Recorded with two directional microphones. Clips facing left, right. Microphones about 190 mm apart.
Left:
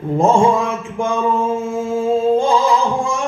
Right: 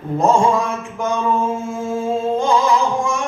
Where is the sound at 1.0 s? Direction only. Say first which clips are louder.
Left 2 dB; 25° left (ahead or behind).